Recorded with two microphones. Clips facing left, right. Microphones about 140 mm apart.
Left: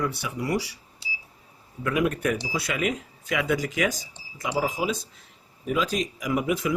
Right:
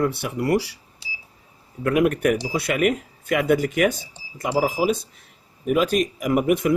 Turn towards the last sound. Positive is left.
turn(degrees=-55)  # may be behind; listen again after turning